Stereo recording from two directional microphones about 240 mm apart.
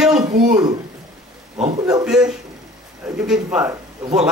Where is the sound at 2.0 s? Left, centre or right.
Centre.